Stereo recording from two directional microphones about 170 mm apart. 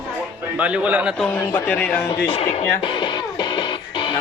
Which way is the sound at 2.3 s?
40° left (ahead or behind).